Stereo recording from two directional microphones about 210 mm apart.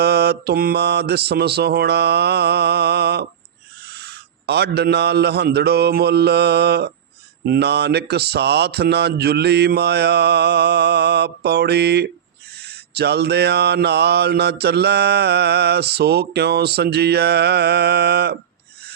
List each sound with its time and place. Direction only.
0.0 s mantra: 50° right (ahead or behind)
3.8 s a man's voice: 50° right (ahead or behind)
7.4 s mantra: 50° right (ahead or behind)